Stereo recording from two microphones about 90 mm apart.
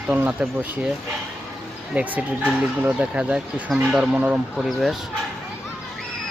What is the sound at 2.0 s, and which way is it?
Speech, 15° right (ahead or behind).